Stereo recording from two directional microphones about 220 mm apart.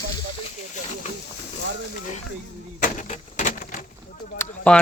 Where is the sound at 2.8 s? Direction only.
35° left (ahead or behind).